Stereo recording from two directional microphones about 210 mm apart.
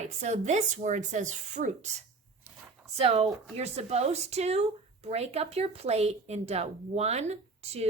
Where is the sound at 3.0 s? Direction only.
30° right (ahead or behind).